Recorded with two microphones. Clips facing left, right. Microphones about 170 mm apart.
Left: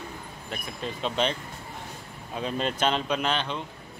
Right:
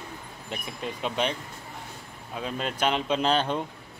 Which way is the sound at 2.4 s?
5° right (ahead or behind).